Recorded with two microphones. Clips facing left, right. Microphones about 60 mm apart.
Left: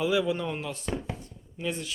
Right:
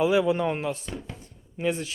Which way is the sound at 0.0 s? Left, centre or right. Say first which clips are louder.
Right 4 dB; right.